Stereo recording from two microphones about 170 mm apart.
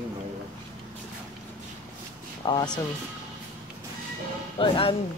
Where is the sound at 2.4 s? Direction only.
25° left (ahead or behind).